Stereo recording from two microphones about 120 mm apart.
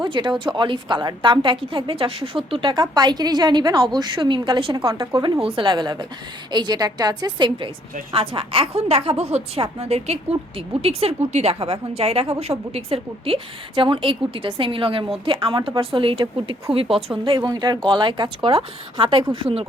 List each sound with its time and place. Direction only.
0.0 s a woman's voice: 40° right (ahead or behind)
8.1 s a woman's voice: 50° right (ahead or behind)
17.2 s a woman's voice: 35° right (ahead or behind)